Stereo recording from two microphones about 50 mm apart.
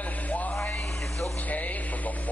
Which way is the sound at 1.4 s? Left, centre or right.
Left.